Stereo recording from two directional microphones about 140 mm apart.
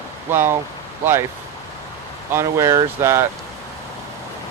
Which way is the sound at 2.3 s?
20° right (ahead or behind).